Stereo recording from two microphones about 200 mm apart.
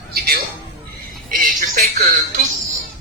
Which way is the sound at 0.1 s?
50° right (ahead or behind).